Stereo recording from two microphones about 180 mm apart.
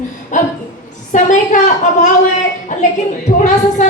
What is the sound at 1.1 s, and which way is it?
Speech, 45° left (ahead or behind).